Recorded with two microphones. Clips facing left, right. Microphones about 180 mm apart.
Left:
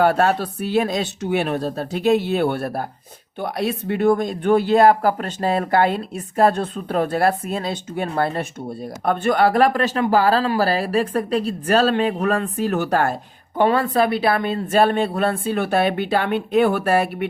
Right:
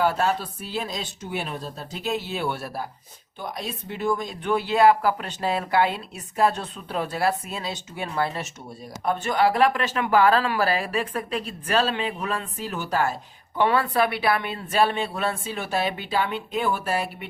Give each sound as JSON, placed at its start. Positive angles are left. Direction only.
{"t": 0.0, "sound": "speech", "side_deg": 65}
{"t": 3.4, "sound": "speech", "side_deg": 65}
{"t": 13.6, "sound": "speech", "side_deg": 45}